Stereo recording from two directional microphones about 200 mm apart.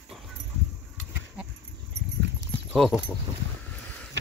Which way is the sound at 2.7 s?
Centre (ahead or behind).